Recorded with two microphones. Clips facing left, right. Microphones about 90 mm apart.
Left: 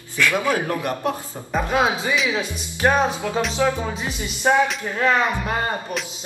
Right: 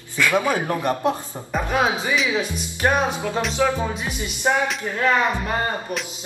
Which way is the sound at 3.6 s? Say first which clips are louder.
Even; centre (ahead or behind).